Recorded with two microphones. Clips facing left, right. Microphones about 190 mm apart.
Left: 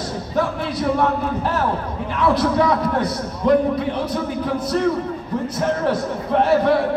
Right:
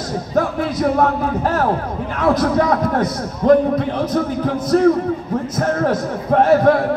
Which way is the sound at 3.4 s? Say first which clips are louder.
Right 4 dB; 40° right (ahead or behind).